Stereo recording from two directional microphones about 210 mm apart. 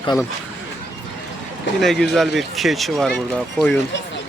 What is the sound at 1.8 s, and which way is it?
Speech, centre (ahead or behind).